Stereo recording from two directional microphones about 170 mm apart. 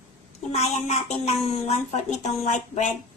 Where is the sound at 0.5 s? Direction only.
40° left (ahead or behind).